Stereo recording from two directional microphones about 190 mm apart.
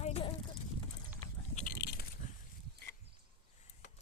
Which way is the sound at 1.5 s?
50° left (ahead or behind).